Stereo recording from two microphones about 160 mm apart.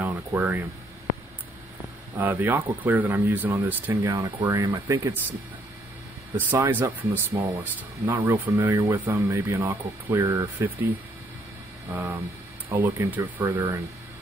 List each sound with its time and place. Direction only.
0.0 s a sound: 10° right (ahead or behind)
2.1 s speech: 10° right (ahead or behind)
6.3 s speech: 10° right (ahead or behind)
11.9 s speech: 10° right (ahead or behind)